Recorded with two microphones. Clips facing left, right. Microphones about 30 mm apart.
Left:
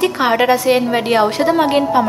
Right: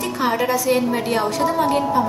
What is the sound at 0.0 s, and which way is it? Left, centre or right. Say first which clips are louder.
A woman's voice: left 6 dB; left.